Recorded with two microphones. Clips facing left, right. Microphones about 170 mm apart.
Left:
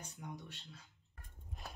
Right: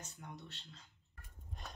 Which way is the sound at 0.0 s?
15° left (ahead or behind).